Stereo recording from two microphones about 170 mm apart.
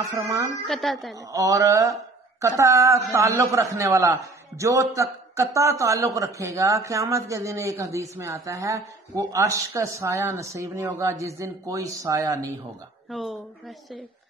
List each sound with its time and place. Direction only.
0.7 s a woman's voice: centre (ahead or behind)
1.3 s a man's voice: 20° right (ahead or behind)
13.1 s a woman's voice: centre (ahead or behind)